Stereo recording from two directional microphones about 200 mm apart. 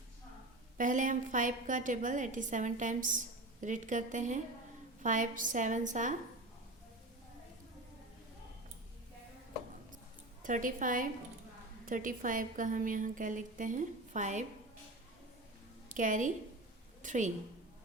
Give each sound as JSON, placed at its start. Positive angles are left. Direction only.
{"t": 0.8, "sound": "a woman's voice", "side_deg": -40}
{"t": 10.4, "sound": "a woman's voice", "side_deg": -40}
{"t": 15.9, "sound": "a woman's voice", "side_deg": -40}